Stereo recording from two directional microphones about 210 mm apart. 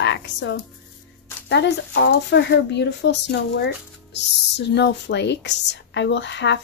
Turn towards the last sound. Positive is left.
turn(degrees=55)  # may be behind; listen again after turning